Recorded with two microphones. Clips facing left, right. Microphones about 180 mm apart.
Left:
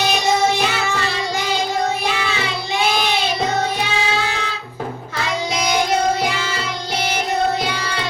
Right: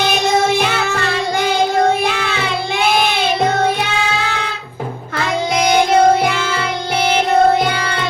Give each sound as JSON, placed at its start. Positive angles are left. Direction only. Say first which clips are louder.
{"t": 0.6, "sound": "child singing", "louder": "right 3 dB", "side_deg": -55}
{"t": 5.1, "sound": "child singing", "louder": "right 6 dB", "side_deg": -55}